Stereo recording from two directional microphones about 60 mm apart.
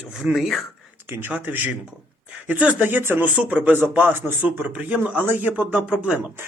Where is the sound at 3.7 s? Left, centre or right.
Right.